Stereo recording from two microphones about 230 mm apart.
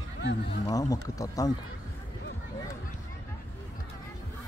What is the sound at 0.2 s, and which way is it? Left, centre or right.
Speech, left.